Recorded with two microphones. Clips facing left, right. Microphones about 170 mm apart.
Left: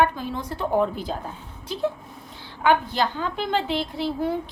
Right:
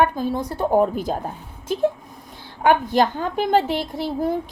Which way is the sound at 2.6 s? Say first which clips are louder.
Right 4 dB; 50° right (ahead or behind).